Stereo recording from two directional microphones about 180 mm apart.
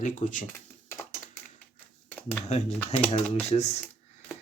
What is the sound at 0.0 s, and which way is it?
Speech, 45° left (ahead or behind).